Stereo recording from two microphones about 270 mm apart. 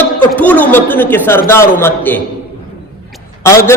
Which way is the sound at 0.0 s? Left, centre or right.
Centre.